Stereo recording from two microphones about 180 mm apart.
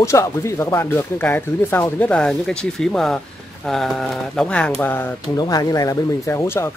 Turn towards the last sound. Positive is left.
turn(degrees=15)  # may be behind; listen again after turning